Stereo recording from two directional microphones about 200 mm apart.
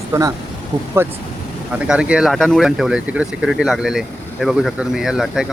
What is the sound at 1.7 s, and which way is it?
Speech, 5° right (ahead or behind).